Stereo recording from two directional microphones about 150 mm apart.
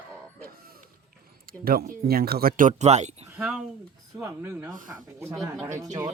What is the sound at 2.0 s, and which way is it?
Speech, 90° right.